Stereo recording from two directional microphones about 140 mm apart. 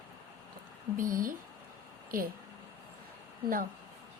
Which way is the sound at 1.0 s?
75° right (ahead or behind).